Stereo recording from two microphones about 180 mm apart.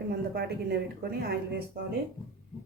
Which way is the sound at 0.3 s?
65° right (ahead or behind).